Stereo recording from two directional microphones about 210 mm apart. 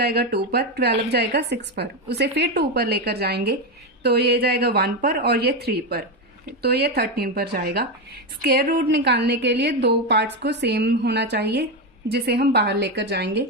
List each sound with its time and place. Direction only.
0.0 s a woman's voice: 50° right (ahead or behind)